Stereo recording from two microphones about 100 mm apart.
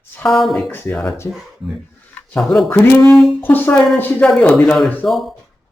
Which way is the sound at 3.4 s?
20° left (ahead or behind).